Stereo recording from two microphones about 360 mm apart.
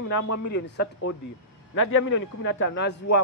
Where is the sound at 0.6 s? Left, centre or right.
Left.